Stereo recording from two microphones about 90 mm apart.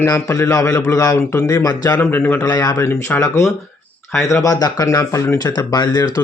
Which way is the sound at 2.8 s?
30° left (ahead or behind).